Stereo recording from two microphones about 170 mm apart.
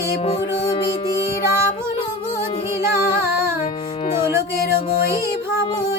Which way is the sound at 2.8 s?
15° right (ahead or behind).